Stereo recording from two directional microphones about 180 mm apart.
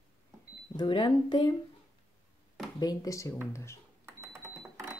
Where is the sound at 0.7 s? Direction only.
25° left (ahead or behind).